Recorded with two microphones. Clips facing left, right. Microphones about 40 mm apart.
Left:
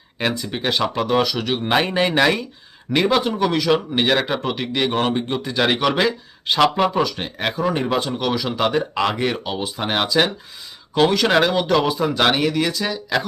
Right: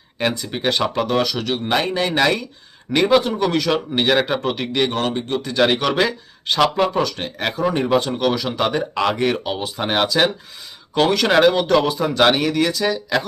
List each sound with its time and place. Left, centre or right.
0.2 s speech: centre; by 2.1 s left
2.1 s speech: centre
4.9 s speech: centre